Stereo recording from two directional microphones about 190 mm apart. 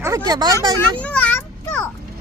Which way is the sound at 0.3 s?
20° right (ahead or behind).